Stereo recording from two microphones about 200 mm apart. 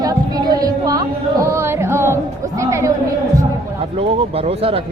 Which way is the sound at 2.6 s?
15° right (ahead or behind).